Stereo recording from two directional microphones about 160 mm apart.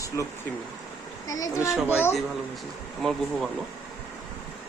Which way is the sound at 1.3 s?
20° left (ahead or behind).